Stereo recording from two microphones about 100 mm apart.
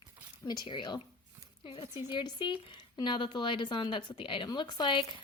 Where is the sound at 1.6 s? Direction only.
80° left.